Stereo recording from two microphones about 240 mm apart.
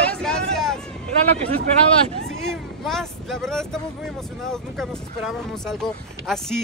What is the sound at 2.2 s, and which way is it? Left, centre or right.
Vehicle, centre.